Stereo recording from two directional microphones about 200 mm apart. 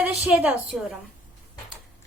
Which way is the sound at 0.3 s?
5° right (ahead or behind).